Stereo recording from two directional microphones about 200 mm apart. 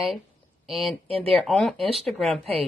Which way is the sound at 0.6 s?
Centre (ahead or behind).